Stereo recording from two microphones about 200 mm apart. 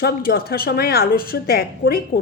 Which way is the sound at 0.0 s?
50° left (ahead or behind).